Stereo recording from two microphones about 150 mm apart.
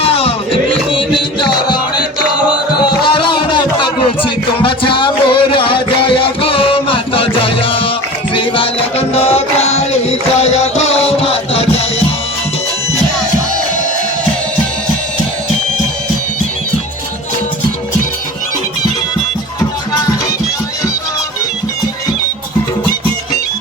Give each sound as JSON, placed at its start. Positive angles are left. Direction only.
{"t": 0.0, "sound": "music", "side_deg": 40}
{"t": 0.9, "sound": "mantra", "side_deg": 30}
{"t": 3.0, "sound": "music", "side_deg": 35}